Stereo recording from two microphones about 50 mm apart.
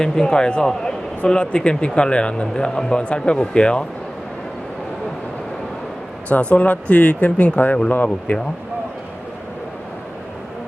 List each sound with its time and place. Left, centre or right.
0.0 s speech: centre
6.2 s speech: left